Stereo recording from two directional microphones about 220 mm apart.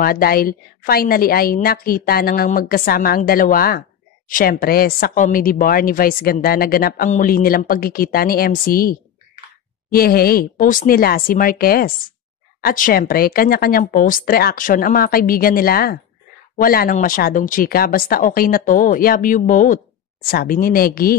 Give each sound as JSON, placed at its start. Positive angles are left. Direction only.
{"t": 0.0, "sound": "a woman's voice", "side_deg": 40}